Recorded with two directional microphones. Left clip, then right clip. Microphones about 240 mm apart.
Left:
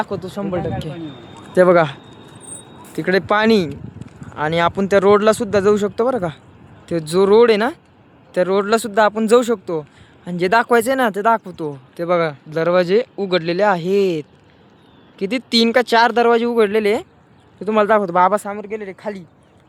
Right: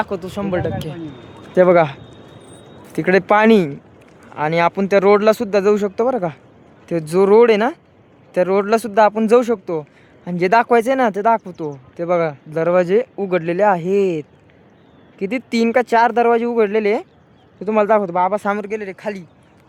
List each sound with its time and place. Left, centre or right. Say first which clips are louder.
0.0 s speech: right 1 dB; centre
1.5 s speech: even; centre
18.4 s speech: right 7 dB; right
18.7 s speech: right 2 dB; centre